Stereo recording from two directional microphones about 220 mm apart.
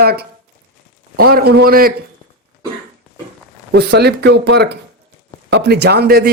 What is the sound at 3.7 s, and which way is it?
Speech, 45° right (ahead or behind).